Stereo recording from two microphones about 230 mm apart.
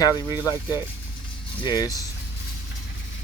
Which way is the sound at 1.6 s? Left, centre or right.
Centre.